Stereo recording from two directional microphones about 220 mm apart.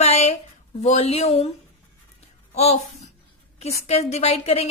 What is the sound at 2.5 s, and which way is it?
Speech, 30° left (ahead or behind).